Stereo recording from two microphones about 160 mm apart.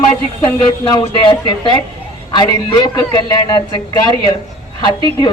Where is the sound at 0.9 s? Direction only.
25° left (ahead or behind).